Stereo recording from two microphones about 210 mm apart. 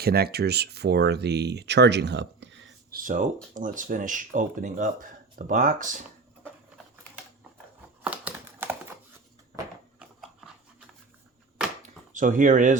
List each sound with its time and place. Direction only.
0.0 s speech: 50° right (ahead or behind)
2.9 s speech: 40° right (ahead or behind)
8.0 s typewriter: 5° right (ahead or behind)
10.0 s dog: centre (ahead or behind)
12.1 s speech: 40° right (ahead or behind)